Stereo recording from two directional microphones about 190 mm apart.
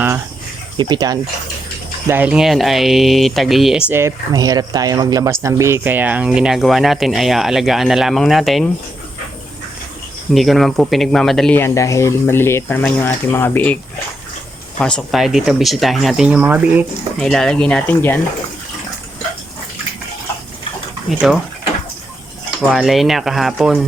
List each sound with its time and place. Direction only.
0.8 s speech: 20° right (ahead or behind)
2.0 s speech: 10° right (ahead or behind)
10.3 s speech: centre (ahead or behind)
14.8 s speech: 5° left (ahead or behind)
17.2 s speech: 5° left (ahead or behind)
21.1 s speech: centre (ahead or behind)
22.7 s speech: centre (ahead or behind)